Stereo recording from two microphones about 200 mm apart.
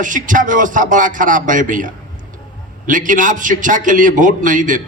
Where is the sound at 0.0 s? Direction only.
40° right (ahead or behind).